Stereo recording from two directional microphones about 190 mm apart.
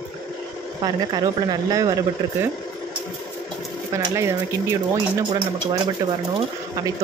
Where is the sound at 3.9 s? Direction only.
15° right (ahead or behind).